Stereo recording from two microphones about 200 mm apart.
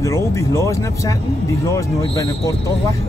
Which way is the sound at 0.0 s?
15° left (ahead or behind).